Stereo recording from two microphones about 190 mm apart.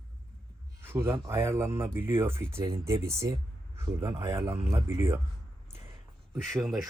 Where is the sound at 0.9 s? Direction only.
15° right (ahead or behind).